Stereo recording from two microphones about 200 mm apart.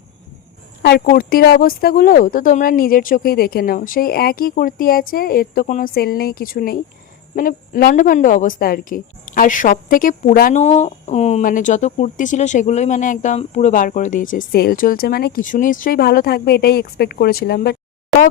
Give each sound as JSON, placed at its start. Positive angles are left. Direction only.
{"t": 0.8, "sound": "speech", "side_deg": 55}